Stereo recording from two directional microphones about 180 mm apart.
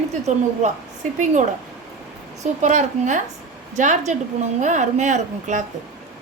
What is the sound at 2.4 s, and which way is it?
A woman's voice, 40° right (ahead or behind).